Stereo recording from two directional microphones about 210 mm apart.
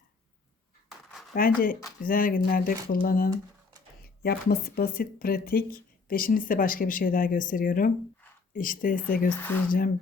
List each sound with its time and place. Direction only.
1.3 s speech: 40° left (ahead or behind)